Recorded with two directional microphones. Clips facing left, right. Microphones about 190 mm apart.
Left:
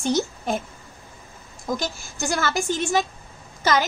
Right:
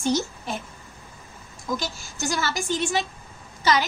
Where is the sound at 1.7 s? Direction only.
50° left (ahead or behind).